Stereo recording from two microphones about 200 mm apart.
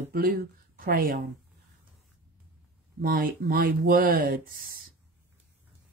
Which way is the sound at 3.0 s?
45° right (ahead or behind).